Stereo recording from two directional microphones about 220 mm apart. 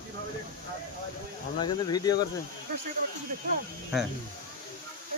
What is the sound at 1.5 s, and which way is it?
Speech, 20° left (ahead or behind).